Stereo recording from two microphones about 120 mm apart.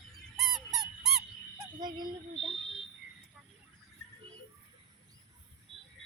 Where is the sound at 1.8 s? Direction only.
35° right (ahead or behind).